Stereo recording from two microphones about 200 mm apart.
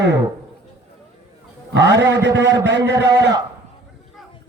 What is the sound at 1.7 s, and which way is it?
Speech, 60° right (ahead or behind).